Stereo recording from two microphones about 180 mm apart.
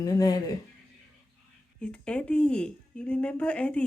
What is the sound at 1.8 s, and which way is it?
Speech, 5° left (ahead or behind).